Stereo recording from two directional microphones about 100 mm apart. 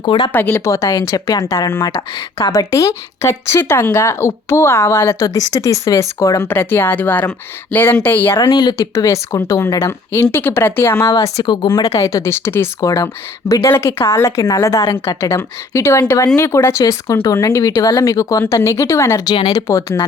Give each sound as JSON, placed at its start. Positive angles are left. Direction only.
{"t": 0.0, "sound": "speech", "side_deg": 55}
{"t": 0.3, "sound": "a woman's voice", "side_deg": 25}
{"t": 8.4, "sound": "a woman's voice", "side_deg": 45}
{"t": 11.4, "sound": "a woman's voice", "side_deg": 45}